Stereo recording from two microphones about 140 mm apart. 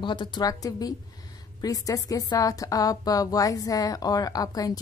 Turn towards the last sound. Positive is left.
turn(degrees=25)  # may be behind; listen again after turning